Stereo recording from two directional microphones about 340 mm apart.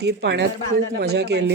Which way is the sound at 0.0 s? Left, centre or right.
Right.